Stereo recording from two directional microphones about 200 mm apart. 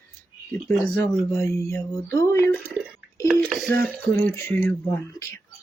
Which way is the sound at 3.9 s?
10° left (ahead or behind).